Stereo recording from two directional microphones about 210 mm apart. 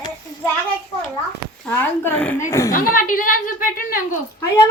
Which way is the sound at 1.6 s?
10° left (ahead or behind).